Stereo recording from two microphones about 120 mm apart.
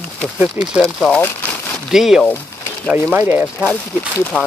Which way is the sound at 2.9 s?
15° right (ahead or behind).